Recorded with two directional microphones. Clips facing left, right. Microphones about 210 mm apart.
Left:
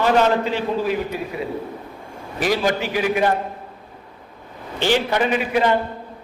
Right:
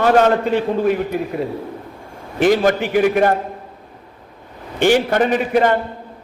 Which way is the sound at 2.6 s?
55° right (ahead or behind).